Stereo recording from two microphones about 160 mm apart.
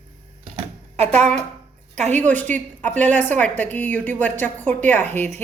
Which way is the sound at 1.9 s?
45° right (ahead or behind).